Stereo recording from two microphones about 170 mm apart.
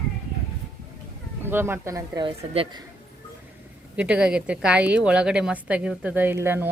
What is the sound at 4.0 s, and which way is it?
A woman's voice, 5° right (ahead or behind).